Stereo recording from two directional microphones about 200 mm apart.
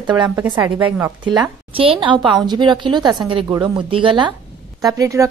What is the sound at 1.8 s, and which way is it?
A woman's voice, 25° right (ahead or behind).